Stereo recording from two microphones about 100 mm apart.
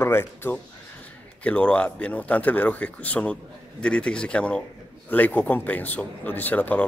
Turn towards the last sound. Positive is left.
turn(degrees=15)  # may be behind; listen again after turning